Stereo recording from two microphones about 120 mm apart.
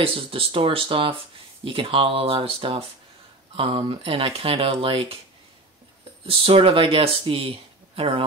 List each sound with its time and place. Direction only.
0.0 s speech: 50° right (ahead or behind)
6.2 s speech: 50° right (ahead or behind)